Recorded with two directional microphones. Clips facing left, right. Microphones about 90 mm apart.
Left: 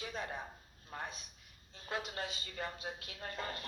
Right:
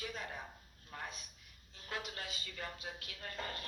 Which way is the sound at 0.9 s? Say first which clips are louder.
Left 2 dB; 30° left (ahead or behind).